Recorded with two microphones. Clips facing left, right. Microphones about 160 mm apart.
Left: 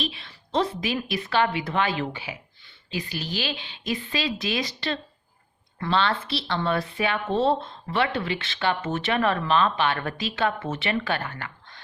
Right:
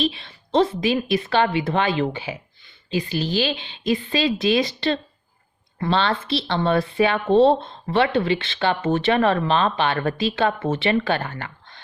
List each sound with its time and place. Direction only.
0.0 s speech: 25° right (ahead or behind)